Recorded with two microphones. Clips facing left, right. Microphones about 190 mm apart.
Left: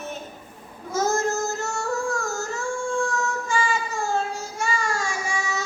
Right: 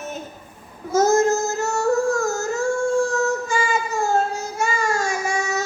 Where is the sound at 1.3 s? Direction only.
40° right (ahead or behind).